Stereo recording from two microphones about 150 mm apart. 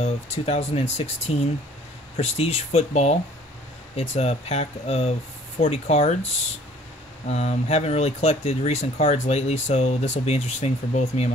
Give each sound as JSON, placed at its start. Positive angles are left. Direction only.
{"t": 0.0, "sound": "speech", "side_deg": 45}
{"t": 7.2, "sound": "speech", "side_deg": 45}